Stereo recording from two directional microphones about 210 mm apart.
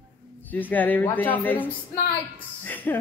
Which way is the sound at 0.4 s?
10° left (ahead or behind).